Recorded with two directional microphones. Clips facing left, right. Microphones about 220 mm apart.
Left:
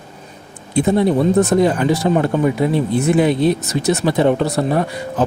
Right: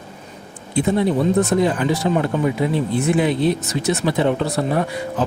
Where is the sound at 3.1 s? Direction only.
45° left (ahead or behind).